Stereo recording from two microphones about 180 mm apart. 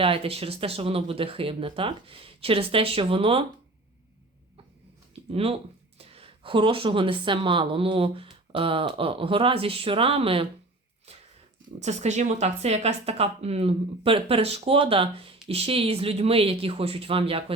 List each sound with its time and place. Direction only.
0.0 s speech: 30° right (ahead or behind)
5.3 s speech: 30° right (ahead or behind)
11.8 s speech: 40° right (ahead or behind)